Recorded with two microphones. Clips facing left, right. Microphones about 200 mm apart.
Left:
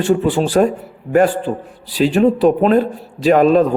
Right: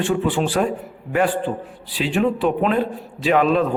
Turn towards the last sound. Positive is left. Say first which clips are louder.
# left 6 dB
turn(degrees=40)  # may be behind; listen again after turning